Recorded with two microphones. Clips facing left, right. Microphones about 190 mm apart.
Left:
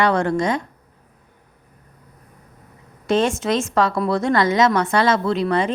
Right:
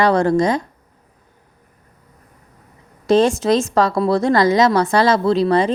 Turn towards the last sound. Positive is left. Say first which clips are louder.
# right 4 dB
turn(degrees=-35)  # may be behind; listen again after turning